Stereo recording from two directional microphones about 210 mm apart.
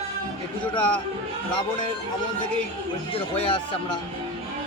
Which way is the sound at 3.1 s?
20° left (ahead or behind).